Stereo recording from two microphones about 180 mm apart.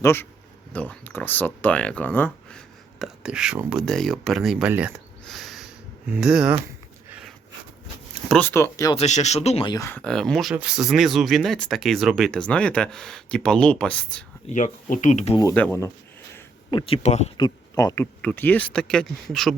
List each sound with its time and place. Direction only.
0.0 s speech: 15° left (ahead or behind); by 4.9 s 10° right (ahead or behind)
5.2 s a sound: centre (ahead or behind)
6.1 s speech: 5° right (ahead or behind)
7.1 s a sound: 5° right (ahead or behind)
8.3 s speech: 10° left (ahead or behind)
9.0 s speech: 40° left (ahead or behind)
9.7 s speech: 15° left (ahead or behind)
10.0 s speech: 5° left (ahead or behind)
14.5 s speech: 45° left (ahead or behind)
15.5 s speech: 10° left (ahead or behind)
16.7 s speech: 30° left (ahead or behind)
17.3 s speech: 20° left (ahead or behind); by 19.5 s centre (ahead or behind)